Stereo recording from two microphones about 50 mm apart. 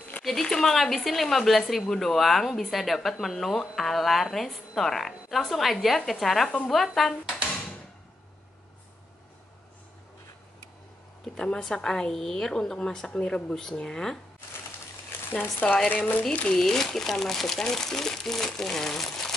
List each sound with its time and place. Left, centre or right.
0.2 s speech: centre
11.2 s speech: centre
16.0 s speech: left
16.4 s speech: centre